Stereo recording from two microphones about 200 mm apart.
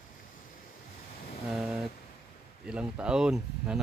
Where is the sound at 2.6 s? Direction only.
5° right (ahead or behind).